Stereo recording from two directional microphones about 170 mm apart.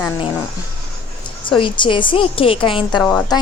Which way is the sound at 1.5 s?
30° left (ahead or behind).